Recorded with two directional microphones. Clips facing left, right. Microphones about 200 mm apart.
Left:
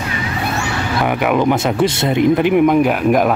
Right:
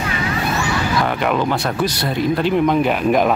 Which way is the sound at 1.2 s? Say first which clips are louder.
Left 4 dB; 15° left (ahead or behind).